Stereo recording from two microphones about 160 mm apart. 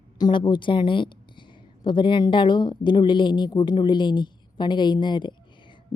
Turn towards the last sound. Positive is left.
turn(degrees=30)  # may be behind; listen again after turning